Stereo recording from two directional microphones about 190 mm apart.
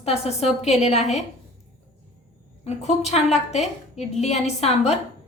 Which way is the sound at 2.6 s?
35° left (ahead or behind).